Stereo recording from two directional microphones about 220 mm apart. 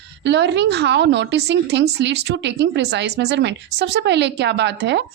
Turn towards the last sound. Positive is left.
turn(degrees=-50)  # may be behind; listen again after turning